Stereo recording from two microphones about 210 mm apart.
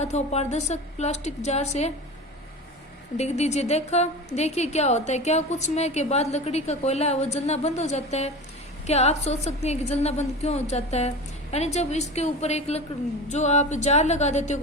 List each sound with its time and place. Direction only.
0.0 s a woman's voice: 30° left (ahead or behind)
3.2 s a woman's voice: 30° left (ahead or behind)